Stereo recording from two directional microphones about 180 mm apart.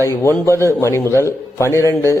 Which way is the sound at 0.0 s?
15° left (ahead or behind).